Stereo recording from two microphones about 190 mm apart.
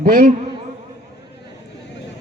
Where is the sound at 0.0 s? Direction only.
50° right (ahead or behind).